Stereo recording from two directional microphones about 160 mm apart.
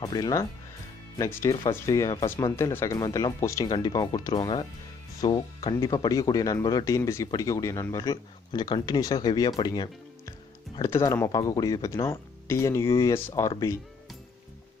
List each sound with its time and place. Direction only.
0.0 s speech: 25° left (ahead or behind)